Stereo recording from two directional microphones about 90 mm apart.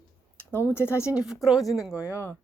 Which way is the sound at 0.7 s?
25° left (ahead or behind).